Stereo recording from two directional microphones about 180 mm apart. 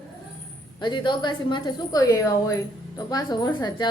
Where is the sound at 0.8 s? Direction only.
25° left (ahead or behind).